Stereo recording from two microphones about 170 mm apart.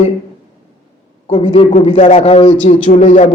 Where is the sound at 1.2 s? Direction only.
35° left (ahead or behind).